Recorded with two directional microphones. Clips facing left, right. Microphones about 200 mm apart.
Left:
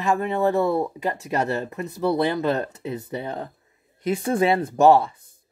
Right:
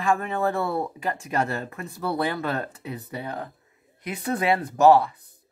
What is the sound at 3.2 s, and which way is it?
Speech, 25° left (ahead or behind).